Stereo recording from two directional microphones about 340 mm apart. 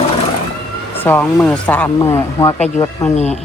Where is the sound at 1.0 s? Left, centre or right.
Centre.